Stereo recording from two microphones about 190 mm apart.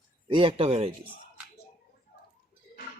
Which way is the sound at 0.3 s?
25° right (ahead or behind).